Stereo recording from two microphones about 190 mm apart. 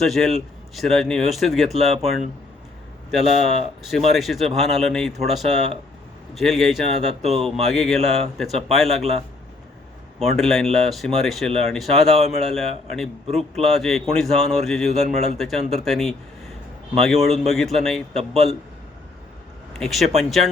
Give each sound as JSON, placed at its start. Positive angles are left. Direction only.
{"t": 0.0, "sound": "speech", "side_deg": 0}
{"t": 7.2, "sound": "a man's voice", "side_deg": -35}
{"t": 7.6, "sound": "speech", "side_deg": 0}
{"t": 10.3, "sound": "speech", "side_deg": 0}
{"t": 13.2, "sound": "a man's voice", "side_deg": -35}
{"t": 13.7, "sound": "speech", "side_deg": 0}
{"t": 19.8, "sound": "speech", "side_deg": 0}